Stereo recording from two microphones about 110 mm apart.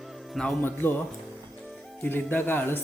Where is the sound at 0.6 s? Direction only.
20° left (ahead or behind).